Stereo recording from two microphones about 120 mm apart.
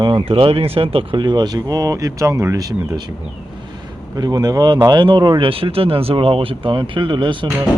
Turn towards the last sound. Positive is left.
turn(degrees=-40)  # may be behind; listen again after turning